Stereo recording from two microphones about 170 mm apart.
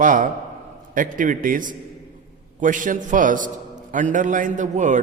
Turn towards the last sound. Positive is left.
turn(degrees=-45)  # may be behind; listen again after turning